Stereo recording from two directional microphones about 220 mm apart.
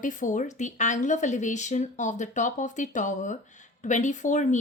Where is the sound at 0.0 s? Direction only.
35° left (ahead or behind).